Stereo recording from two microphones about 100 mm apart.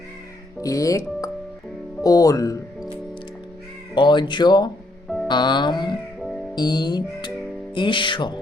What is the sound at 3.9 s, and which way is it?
Speech, 50° left (ahead or behind).